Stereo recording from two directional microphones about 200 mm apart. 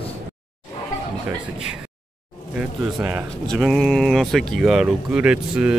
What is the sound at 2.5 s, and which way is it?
Speech, 10° right (ahead or behind).